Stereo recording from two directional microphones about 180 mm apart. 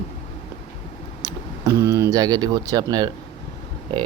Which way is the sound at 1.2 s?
15° right (ahead or behind).